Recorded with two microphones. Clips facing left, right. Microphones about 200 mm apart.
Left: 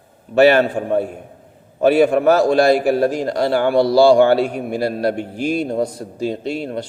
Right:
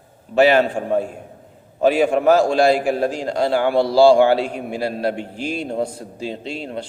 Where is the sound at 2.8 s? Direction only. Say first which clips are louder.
Left 4 dB; 40° left (ahead or behind).